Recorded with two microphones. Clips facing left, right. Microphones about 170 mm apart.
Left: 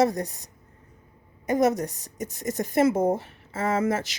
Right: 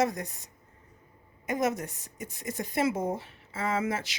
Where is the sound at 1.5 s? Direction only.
40° left (ahead or behind).